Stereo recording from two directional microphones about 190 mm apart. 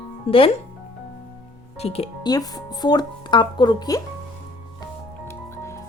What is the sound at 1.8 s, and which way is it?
Speech, 30° left (ahead or behind).